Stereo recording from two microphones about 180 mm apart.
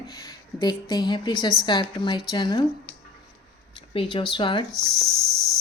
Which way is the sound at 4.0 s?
25° left (ahead or behind).